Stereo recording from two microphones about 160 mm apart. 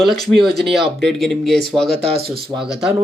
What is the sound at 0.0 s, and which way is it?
Speech, centre (ahead or behind).